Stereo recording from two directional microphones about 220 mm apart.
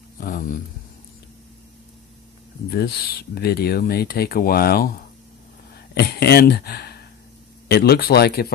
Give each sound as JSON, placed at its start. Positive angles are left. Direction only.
{"t": 0.2, "sound": "speech", "side_deg": 40}
{"t": 2.6, "sound": "speech", "side_deg": 45}
{"t": 5.9, "sound": "speech", "side_deg": 45}